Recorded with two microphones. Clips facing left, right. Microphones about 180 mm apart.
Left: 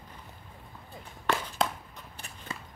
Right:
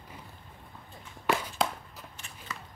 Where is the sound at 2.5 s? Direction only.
30° left (ahead or behind).